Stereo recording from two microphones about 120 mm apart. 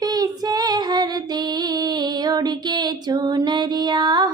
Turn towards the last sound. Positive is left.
turn(degrees=-40)  # may be behind; listen again after turning